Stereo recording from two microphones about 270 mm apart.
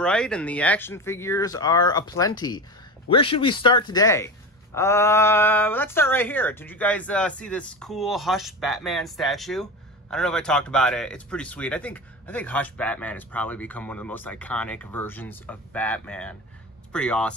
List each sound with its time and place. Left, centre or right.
0.0 s speech: centre